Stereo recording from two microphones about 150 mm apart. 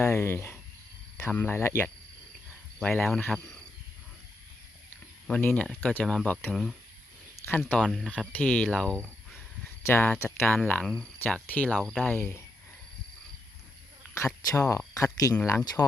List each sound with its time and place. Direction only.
0.0 s speech: 15° left (ahead or behind)
5.3 s speech: 10° left (ahead or behind)
7.3 s speech: 15° left (ahead or behind)
7.8 s speech: centre (ahead or behind)
8.3 s speech: 10° left (ahead or behind)
14.7 s speech: 20° left (ahead or behind)